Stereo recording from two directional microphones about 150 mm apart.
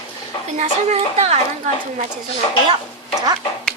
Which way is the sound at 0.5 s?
50° right (ahead or behind).